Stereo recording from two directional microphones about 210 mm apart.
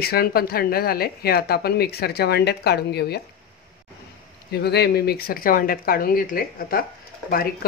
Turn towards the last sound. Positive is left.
turn(degrees=45)  # may be behind; listen again after turning